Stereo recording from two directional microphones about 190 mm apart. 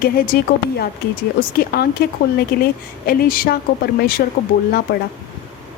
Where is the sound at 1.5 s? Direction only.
55° left (ahead or behind).